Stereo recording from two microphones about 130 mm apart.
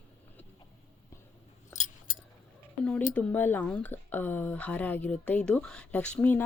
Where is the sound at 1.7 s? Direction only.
70° left (ahead or behind).